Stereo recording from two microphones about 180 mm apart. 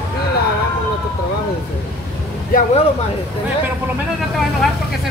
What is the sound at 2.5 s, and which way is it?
Speech, 50° left (ahead or behind).